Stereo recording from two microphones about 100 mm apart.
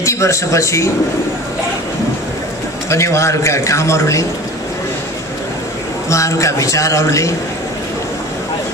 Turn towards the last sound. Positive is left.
turn(degrees=30)  # may be behind; listen again after turning